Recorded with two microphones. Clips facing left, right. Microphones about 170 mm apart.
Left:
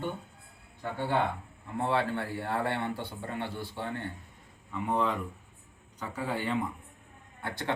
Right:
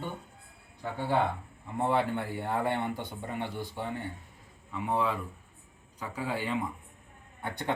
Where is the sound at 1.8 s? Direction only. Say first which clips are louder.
Right 1 dB; 15° right (ahead or behind).